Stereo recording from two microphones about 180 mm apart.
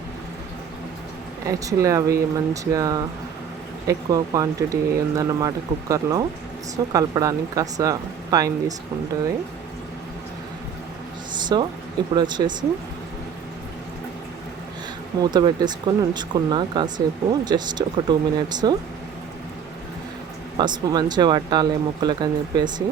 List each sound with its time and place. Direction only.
1.5 s speech: 20° right (ahead or behind)
11.3 s a sound: 25° right (ahead or behind)
12.1 s speech: 25° right (ahead or behind)
15.2 s speech: 25° right (ahead or behind)
20.6 s speech: 25° right (ahead or behind)